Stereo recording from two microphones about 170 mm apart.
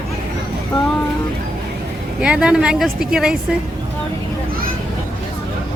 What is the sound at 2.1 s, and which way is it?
Speech, 5° right (ahead or behind).